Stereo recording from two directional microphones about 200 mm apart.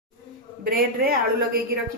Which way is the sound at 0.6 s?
50° right (ahead or behind).